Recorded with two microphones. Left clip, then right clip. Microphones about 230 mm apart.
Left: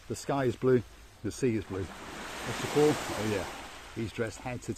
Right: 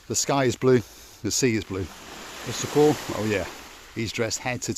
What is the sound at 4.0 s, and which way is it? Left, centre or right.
Speech, right.